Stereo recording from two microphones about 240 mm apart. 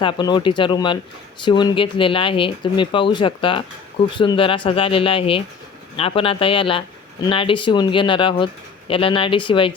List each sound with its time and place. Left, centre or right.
0.0 s speech: centre